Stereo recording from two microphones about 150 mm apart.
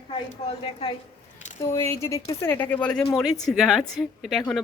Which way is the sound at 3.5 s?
Centre (ahead or behind).